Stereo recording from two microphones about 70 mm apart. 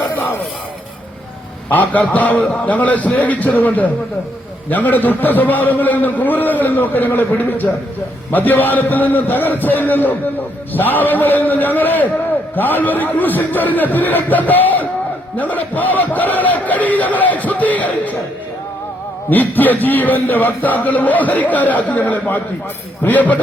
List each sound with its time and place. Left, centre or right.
1.7 s a man's voice: left
19.3 s a man's voice: left